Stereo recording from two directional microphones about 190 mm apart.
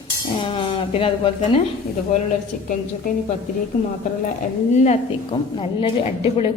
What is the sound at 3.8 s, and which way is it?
Speech, 35° left (ahead or behind).